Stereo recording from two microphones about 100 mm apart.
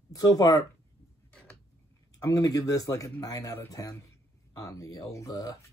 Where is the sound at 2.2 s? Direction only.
35° left (ahead or behind).